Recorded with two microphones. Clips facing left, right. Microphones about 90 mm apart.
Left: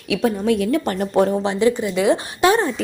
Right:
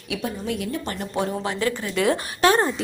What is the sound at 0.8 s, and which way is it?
Speech, 45° left (ahead or behind).